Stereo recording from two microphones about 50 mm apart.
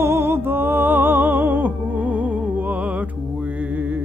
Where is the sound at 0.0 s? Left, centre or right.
Right.